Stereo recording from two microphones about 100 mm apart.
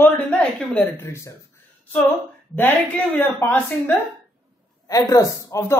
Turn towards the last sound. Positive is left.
turn(degrees=25)  # may be behind; listen again after turning